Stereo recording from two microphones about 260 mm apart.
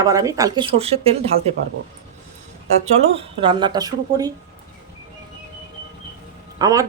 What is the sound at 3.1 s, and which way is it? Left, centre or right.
Speech, centre.